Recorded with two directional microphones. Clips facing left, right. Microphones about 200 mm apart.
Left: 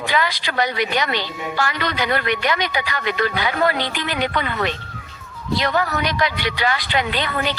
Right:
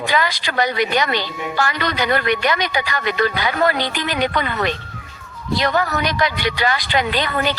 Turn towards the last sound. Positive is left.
turn(degrees=-40)  # may be behind; listen again after turning